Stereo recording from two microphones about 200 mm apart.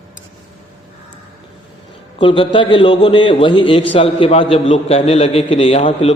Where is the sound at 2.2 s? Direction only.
25° left (ahead or behind).